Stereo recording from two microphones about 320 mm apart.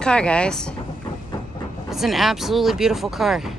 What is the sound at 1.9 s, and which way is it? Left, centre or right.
Speech, centre.